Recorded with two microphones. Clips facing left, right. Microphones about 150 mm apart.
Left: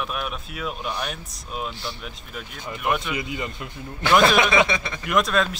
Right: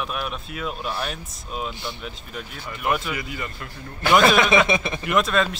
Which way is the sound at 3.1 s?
20° left (ahead or behind).